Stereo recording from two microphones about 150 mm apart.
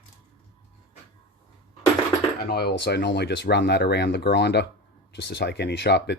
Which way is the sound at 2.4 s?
90° left.